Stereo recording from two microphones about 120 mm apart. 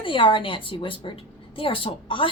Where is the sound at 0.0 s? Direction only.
45° left (ahead or behind).